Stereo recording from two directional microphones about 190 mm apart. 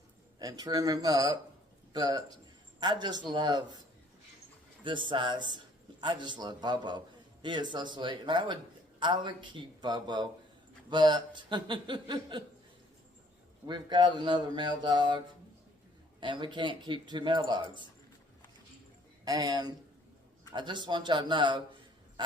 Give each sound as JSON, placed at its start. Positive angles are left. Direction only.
{"t": 0.3, "sound": "a man's voice", "side_deg": -20}
{"t": 4.8, "sound": "speech", "side_deg": -25}
{"t": 13.7, "sound": "speech", "side_deg": -25}
{"t": 16.2, "sound": "speech", "side_deg": -25}
{"t": 19.2, "sound": "speech", "side_deg": -20}